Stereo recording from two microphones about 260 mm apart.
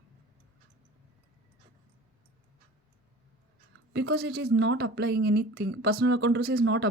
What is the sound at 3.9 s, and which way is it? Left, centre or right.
A woman's voice, right.